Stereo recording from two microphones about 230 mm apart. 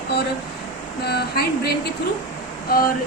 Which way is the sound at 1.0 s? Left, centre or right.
Left.